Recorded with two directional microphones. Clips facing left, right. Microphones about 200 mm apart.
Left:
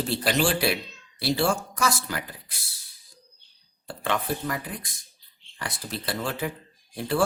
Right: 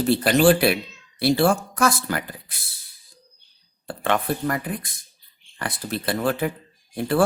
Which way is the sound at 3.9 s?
55° right (ahead or behind).